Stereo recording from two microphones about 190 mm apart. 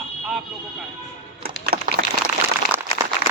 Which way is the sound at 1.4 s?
55° right (ahead or behind).